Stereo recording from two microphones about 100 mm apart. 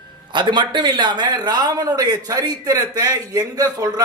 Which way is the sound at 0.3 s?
50° right (ahead or behind).